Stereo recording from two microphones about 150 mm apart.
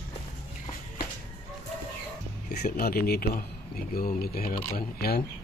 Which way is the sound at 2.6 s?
85° left.